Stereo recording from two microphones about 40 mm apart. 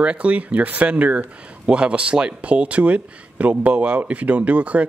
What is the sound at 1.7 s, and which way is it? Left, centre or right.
Speech, right.